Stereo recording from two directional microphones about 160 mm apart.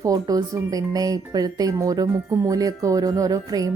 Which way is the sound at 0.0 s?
20° right (ahead or behind).